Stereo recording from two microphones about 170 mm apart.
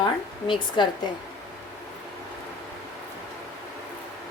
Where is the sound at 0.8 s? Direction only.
25° left (ahead or behind).